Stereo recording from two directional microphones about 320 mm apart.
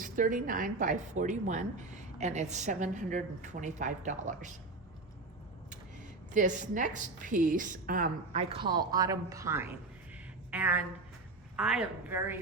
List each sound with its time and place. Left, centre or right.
0.0 s a woman's voice: right
6.3 s a woman's voice: right; by 12.4 s centre